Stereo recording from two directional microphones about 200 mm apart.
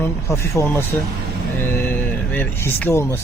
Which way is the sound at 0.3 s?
15° left (ahead or behind).